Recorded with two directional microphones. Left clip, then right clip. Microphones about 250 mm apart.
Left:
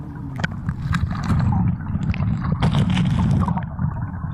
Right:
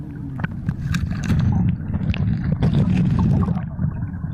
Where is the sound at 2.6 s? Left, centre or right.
Centre.